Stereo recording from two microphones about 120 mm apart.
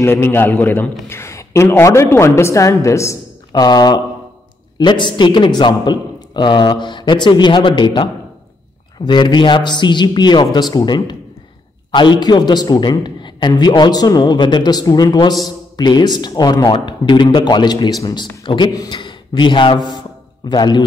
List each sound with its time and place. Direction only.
0.0 s a man's voice: 20° left (ahead or behind)
11.9 s a man's voice: 40° left (ahead or behind)